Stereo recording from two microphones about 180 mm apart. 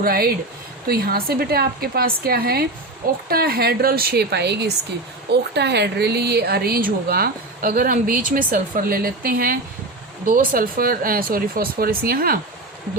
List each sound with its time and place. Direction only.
0.0 s a woman's voice: 55° right (ahead or behind)